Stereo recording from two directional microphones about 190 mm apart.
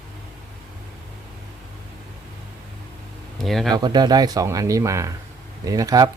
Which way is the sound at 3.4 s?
Centre (ahead or behind).